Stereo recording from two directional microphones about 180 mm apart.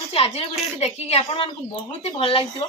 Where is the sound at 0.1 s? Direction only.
35° left (ahead or behind).